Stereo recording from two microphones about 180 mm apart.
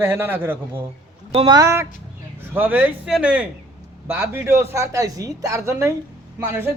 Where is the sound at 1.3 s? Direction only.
35° right (ahead or behind).